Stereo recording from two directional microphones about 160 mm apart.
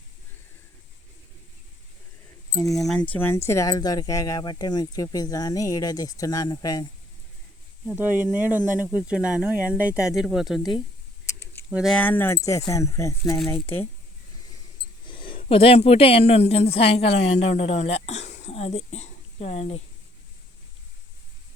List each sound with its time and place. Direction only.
2.6 s speech: centre (ahead or behind)
3.1 s speech: 15° left (ahead or behind)
7.9 s speech: 10° right (ahead or behind)
11.3 s a sound: 15° left (ahead or behind)
11.7 s speech: centre (ahead or behind)
11.9 s speech: 10° left (ahead or behind)
15.0 s speech: 30° left (ahead or behind)